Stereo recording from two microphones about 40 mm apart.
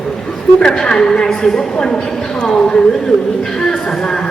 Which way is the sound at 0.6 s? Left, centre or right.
Centre.